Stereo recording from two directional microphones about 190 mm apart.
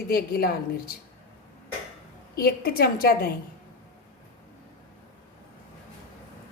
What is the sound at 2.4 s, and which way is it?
Speech, 55° left (ahead or behind).